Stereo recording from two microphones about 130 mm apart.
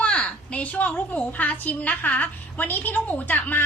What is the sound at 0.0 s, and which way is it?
A woman's voice, 10° left (ahead or behind).